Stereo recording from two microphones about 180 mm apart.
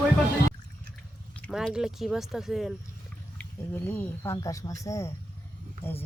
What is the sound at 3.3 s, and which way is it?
Speech, 10° left (ahead or behind).